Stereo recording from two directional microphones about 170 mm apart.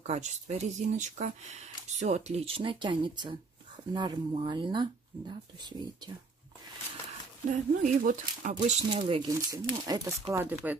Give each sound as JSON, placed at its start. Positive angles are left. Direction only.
{"t": 0.0, "sound": "speech", "side_deg": -40}
{"t": 7.5, "sound": "speech", "side_deg": -50}
{"t": 8.9, "sound": "speech", "side_deg": -25}
{"t": 10.4, "sound": "speech", "side_deg": -10}